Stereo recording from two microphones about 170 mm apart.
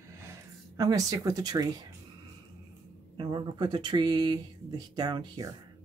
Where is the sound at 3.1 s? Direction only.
25° right (ahead or behind).